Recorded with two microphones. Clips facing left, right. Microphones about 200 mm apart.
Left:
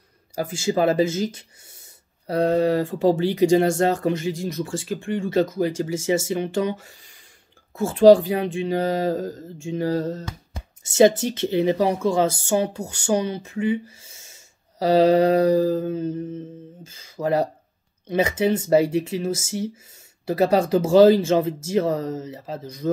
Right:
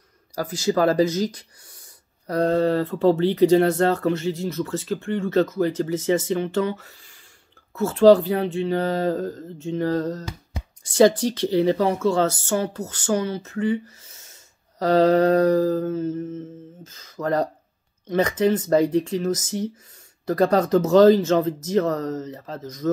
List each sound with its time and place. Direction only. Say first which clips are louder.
0.4 s speech: right 1 dB; 25° left (ahead or behind)
2.5 s speech: even; 10° left (ahead or behind)
10.8 s speech: even; 25° left (ahead or behind)